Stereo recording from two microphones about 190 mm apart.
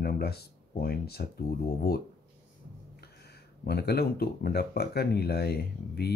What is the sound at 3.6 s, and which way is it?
Speech, 55° left (ahead or behind).